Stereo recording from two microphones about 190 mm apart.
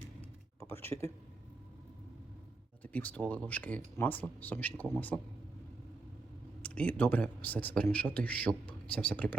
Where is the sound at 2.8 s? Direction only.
10° left (ahead or behind).